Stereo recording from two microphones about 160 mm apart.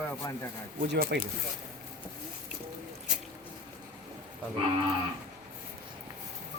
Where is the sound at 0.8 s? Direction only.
80° right.